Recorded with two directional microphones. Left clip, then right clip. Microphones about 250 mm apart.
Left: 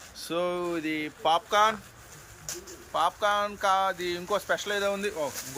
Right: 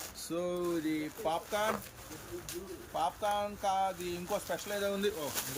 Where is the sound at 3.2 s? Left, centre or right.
Left.